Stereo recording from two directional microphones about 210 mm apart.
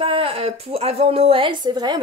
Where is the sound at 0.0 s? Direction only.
25° right (ahead or behind).